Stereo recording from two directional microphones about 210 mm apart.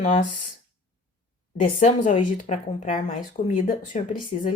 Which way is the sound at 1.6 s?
35° left (ahead or behind).